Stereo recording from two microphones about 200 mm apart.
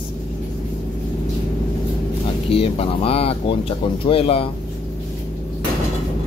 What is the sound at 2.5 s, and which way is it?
Speech, 30° left (ahead or behind).